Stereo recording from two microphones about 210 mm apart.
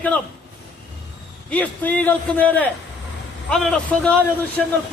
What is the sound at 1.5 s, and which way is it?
A man's voice, 5° left (ahead or behind).